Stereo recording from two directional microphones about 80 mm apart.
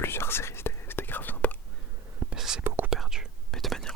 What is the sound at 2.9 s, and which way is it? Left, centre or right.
Whispering, centre.